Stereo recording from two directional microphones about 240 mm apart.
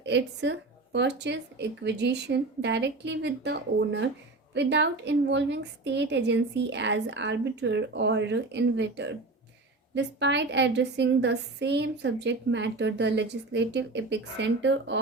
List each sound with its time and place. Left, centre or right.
0.0 s a woman's voice: right